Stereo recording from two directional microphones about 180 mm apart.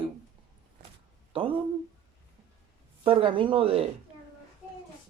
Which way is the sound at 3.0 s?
30° right (ahead or behind).